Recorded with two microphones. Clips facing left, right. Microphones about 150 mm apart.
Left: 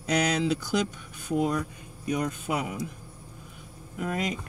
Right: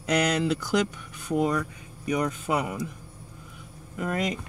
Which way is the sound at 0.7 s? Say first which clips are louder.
Right 2 dB; 75° right (ahead or behind).